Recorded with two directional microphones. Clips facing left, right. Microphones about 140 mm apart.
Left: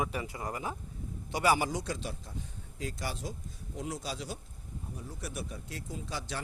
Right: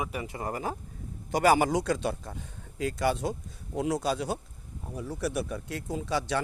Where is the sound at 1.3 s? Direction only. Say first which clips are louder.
Right 6 dB; 45° right (ahead or behind).